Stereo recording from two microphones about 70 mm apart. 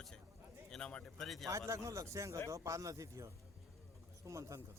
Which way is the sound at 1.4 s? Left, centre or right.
Right.